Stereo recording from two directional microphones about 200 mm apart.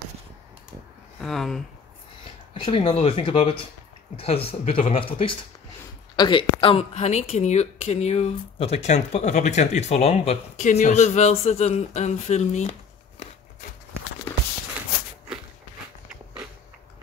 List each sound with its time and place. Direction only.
1.2 s speech: centre (ahead or behind)
2.6 s speech: 25° left (ahead or behind)